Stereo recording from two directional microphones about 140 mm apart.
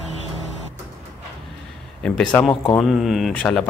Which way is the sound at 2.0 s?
10° left (ahead or behind).